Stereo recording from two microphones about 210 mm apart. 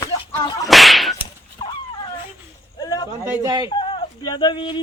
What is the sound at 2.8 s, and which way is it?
Speech, 20° left (ahead or behind).